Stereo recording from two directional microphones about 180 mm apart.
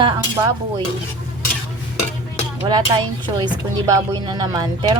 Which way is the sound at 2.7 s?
25° right (ahead or behind).